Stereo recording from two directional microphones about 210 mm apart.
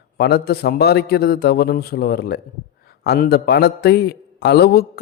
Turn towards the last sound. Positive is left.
turn(degrees=50)  # may be behind; listen again after turning